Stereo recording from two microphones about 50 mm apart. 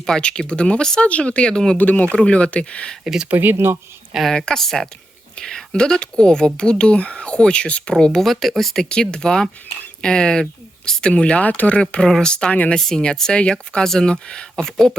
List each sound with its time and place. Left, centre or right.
0.0 s speech: centre
1.8 s speech: left
3.0 s speech: centre
3.2 s speech: right
4.3 s speech: centre
8.2 s speech: centre; by 11.8 s left
11.8 s speech: centre